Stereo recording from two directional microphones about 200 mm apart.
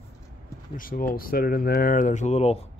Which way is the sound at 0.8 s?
45° left (ahead or behind).